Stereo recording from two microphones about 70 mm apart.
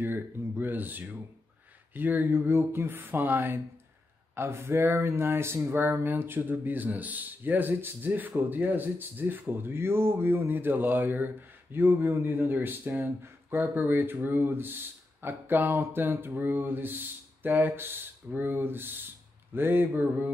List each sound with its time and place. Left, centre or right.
0.0 s speech: right